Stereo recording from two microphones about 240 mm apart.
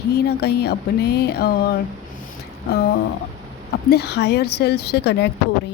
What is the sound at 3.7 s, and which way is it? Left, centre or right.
A woman's voice, left.